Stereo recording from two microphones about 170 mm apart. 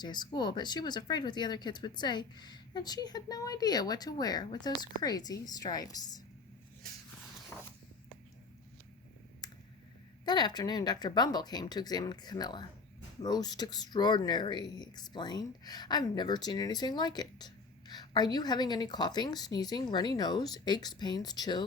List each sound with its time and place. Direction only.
0.0 s speech: 25° left (ahead or behind)
9.4 s clicking: 25° left (ahead or behind)
10.2 s speech: 25° left (ahead or behind)